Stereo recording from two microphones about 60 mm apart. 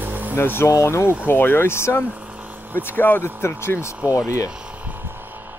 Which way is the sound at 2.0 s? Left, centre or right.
Right.